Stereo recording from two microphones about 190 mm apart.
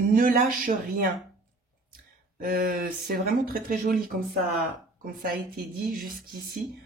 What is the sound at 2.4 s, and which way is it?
Speech, 50° right (ahead or behind).